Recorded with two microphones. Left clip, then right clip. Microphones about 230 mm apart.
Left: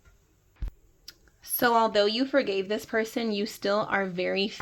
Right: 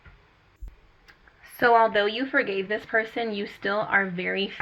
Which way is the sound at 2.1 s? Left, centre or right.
Left.